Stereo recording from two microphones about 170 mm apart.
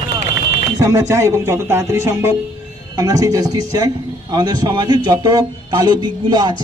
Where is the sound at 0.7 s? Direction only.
20° right (ahead or behind).